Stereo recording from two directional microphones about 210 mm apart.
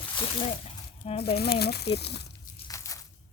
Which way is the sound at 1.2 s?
50° left (ahead or behind).